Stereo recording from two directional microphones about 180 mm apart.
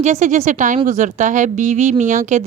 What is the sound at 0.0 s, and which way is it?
Speech, 40° right (ahead or behind).